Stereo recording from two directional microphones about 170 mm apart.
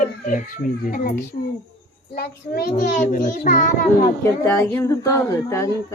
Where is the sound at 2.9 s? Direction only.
50° left (ahead or behind).